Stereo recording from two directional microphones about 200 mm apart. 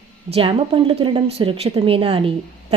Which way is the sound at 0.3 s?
25° right (ahead or behind).